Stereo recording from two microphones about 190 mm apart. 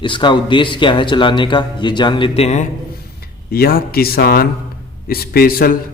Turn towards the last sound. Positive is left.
turn(degrees=50)  # may be behind; listen again after turning